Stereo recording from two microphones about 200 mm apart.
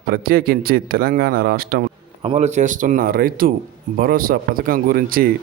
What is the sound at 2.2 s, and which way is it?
A man's voice, 30° right (ahead or behind).